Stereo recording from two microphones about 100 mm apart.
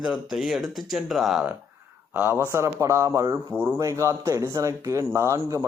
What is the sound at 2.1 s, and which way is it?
A man's voice, 20° right (ahead or behind).